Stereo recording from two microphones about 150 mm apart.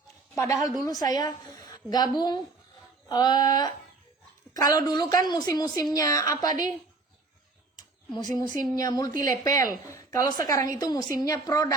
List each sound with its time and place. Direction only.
0.3 s a woman's voice: 20° left (ahead or behind)
7.8 s a sound: 30° left (ahead or behind)
8.7 s a woman's voice: 25° left (ahead or behind)